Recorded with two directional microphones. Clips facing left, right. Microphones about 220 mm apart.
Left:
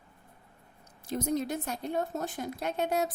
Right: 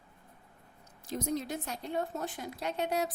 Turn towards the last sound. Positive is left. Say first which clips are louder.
# left 2 dB
turn(degrees=50)  # may be behind; listen again after turning